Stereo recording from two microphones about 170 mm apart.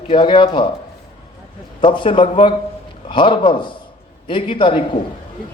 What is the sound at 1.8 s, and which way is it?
A man's voice, 30° left (ahead or behind).